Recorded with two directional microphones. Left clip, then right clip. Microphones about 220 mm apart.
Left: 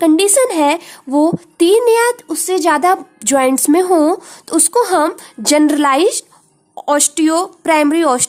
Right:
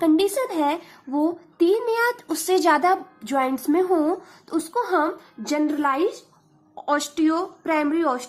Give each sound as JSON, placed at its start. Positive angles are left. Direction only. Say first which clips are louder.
{"t": 0.0, "sound": "a woman's voice", "louder": "left 9 dB", "side_deg": 30}
{"t": 2.2, "sound": "a woman's voice", "louder": "left 5 dB", "side_deg": 15}